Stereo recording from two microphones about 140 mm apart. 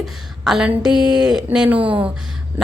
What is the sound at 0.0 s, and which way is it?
A woman's voice, 5° right (ahead or behind).